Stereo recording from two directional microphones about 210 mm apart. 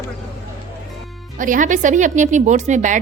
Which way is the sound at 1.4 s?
40° right (ahead or behind).